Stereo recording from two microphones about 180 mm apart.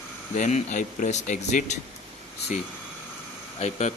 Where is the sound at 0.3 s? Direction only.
40° left (ahead or behind).